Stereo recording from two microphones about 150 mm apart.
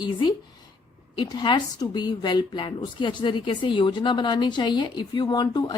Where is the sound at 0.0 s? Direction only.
30° left (ahead or behind).